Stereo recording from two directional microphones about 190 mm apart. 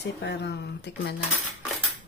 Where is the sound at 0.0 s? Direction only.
60° left (ahead or behind).